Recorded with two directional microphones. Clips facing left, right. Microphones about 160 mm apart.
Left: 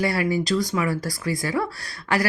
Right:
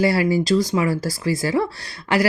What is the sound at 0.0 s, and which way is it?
Speech, 30° right (ahead or behind).